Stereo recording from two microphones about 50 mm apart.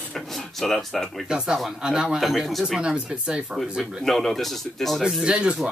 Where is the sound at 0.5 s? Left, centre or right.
Centre.